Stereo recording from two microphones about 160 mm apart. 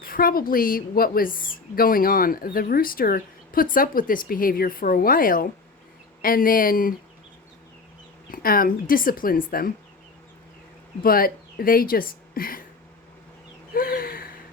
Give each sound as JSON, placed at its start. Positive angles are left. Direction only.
{"t": 0.0, "sound": "speech", "side_deg": 65}
{"t": 8.3, "sound": "speech", "side_deg": 65}
{"t": 11.0, "sound": "speech", "side_deg": 65}
{"t": 13.7, "sound": "a sound", "side_deg": 65}